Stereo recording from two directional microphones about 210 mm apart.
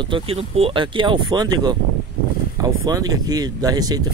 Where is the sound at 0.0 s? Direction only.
25° right (ahead or behind).